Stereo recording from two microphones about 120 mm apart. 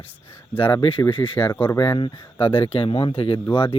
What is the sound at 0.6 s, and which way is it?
Speech, 45° left (ahead or behind).